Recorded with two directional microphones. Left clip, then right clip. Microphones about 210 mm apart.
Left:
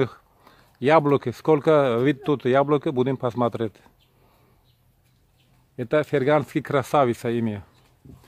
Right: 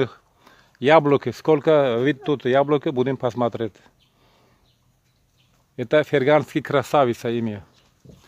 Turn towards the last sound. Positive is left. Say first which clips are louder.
# right 1 dB
turn(degrees=0)  # may be behind; listen again after turning